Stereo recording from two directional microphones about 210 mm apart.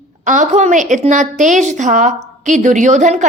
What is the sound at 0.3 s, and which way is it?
A woman's voice, 35° right (ahead or behind).